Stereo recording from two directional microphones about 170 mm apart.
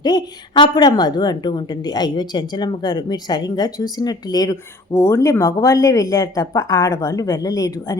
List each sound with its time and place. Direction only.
0.0 s a woman's voice: 25° left (ahead or behind)